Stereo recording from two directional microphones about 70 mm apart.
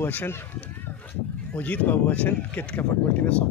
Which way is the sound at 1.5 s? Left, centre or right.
Left.